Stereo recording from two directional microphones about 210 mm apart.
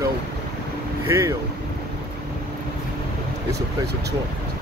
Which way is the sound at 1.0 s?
15° right (ahead or behind).